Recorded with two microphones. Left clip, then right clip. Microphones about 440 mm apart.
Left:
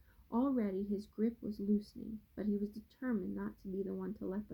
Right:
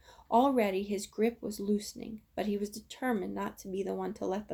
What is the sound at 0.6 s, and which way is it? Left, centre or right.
Speech, centre.